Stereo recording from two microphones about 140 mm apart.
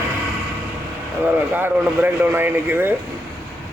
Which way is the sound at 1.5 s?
15° right (ahead or behind).